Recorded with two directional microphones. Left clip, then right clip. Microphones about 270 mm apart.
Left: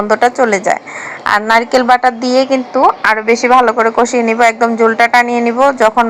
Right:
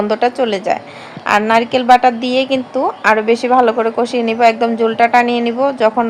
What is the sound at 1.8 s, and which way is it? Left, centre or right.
Speech, centre.